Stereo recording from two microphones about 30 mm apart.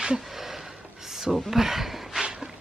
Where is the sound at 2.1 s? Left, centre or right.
Right.